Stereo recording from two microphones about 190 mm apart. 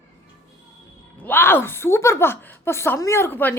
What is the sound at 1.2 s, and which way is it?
Speech, 10° left (ahead or behind).